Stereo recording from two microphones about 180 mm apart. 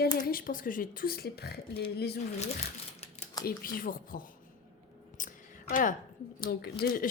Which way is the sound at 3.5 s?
55° left (ahead or behind).